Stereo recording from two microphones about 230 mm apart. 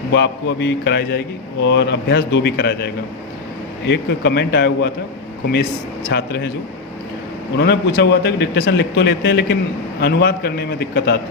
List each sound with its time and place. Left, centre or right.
0.1 s speech: left
6.1 s speech: left
7.5 s speech: left